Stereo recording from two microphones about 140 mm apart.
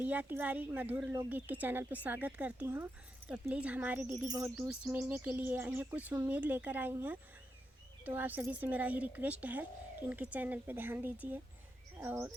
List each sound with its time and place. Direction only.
0.0 s speech: 10° right (ahead or behind)
4.3 s bird: 20° right (ahead or behind)
4.7 s speech: 10° right (ahead or behind)
11.9 s bird: 20° right (ahead or behind)